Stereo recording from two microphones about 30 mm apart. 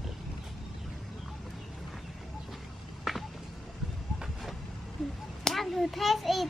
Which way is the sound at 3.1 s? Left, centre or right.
Centre.